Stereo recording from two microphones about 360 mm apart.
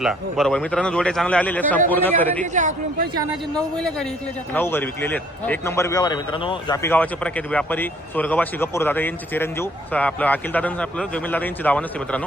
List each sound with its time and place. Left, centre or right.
0.0 s a man's voice: centre
2.4 s speech: centre
3.5 s a man's voice: centre